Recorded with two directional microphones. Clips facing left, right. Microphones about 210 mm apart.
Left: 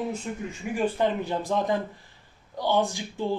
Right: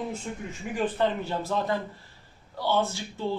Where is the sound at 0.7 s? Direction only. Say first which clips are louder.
Left 1 dB; 10° left (ahead or behind).